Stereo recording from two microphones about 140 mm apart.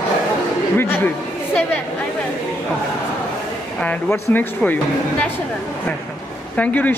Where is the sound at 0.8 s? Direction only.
15° left (ahead or behind).